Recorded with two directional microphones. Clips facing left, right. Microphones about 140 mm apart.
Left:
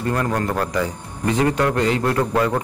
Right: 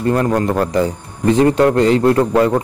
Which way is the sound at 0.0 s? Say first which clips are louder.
Right 6 dB; 30° right (ahead or behind).